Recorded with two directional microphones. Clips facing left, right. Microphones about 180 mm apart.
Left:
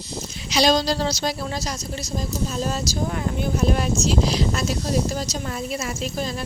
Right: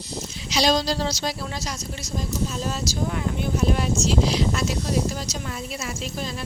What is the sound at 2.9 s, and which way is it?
Speech, 40° left (ahead or behind).